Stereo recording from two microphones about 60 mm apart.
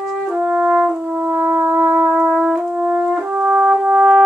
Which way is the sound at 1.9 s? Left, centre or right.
Right.